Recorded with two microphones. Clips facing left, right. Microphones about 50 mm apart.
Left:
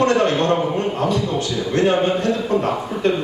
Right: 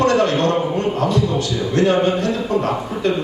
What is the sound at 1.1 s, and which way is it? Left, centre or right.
A man's voice, centre.